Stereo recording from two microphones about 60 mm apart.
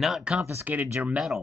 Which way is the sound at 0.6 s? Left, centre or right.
Right.